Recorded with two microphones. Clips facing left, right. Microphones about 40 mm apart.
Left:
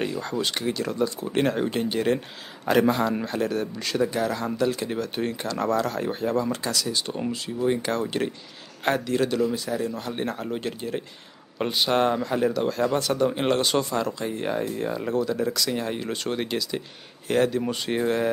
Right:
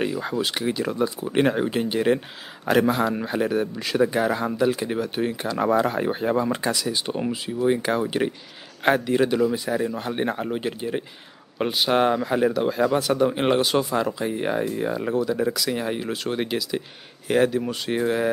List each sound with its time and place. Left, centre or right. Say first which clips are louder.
0.0 s speech: right 2 dB; centre